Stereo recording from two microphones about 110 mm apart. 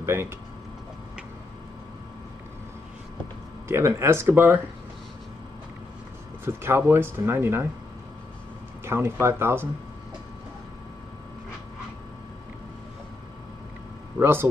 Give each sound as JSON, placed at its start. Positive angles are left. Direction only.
{"t": 0.0, "sound": "speech", "side_deg": -25}
{"t": 3.6, "sound": "speech", "side_deg": -25}
{"t": 6.4, "sound": "speech", "side_deg": -20}
{"t": 8.8, "sound": "speech", "side_deg": -25}
{"t": 14.1, "sound": "speech", "side_deg": -20}